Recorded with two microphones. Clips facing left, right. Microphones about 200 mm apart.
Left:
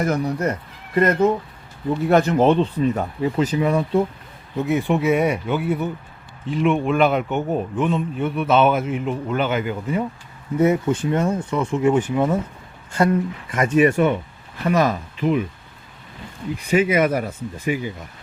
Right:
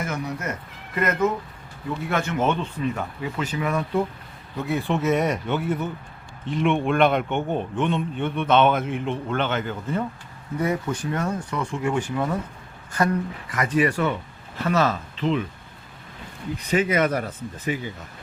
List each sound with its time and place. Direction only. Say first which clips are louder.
0.0 s speech: left 8 dB; 35° left (ahead or behind); by 10.0 s 10° left (ahead or behind)
10.6 s speech: left 7 dB; 25° left (ahead or behind)
16.6 s speech: left 4 dB; 10° left (ahead or behind)